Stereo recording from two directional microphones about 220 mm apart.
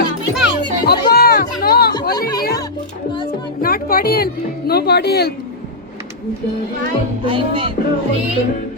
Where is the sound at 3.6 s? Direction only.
40° left (ahead or behind).